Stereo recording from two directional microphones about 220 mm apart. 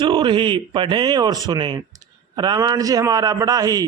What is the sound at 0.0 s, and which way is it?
A man's voice, 20° right (ahead or behind).